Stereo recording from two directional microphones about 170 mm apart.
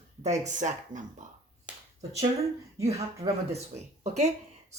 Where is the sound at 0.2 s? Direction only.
45° right (ahead or behind).